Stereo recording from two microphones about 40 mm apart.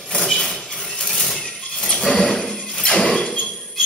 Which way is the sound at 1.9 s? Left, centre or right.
Centre.